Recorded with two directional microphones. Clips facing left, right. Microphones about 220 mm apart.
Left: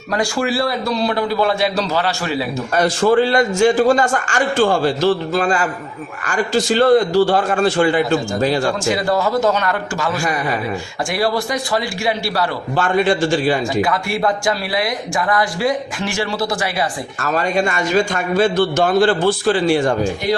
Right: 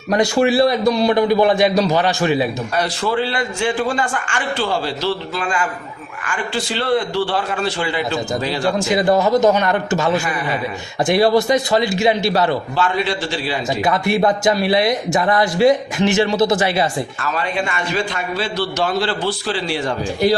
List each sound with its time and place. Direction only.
0.1 s a man's voice: 20° right (ahead or behind)
2.7 s a man's voice: 50° left (ahead or behind)
9.0 s a man's voice: 20° right (ahead or behind)
11.1 s a man's voice: 20° right (ahead or behind)
12.7 s a man's voice: 50° left (ahead or behind)
13.8 s a man's voice: 20° right (ahead or behind)
17.2 s a man's voice: 45° left (ahead or behind)